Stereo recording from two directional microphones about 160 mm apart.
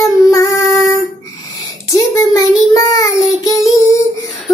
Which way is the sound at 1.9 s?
20° left (ahead or behind).